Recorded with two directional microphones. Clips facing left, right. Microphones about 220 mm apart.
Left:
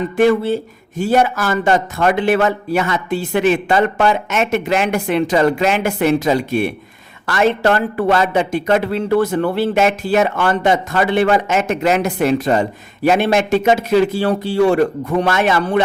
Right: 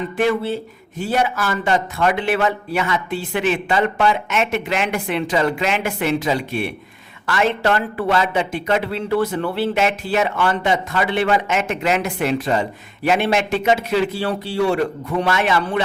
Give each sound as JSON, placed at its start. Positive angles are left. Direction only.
{"t": 0.2, "sound": "a man's voice", "side_deg": 45}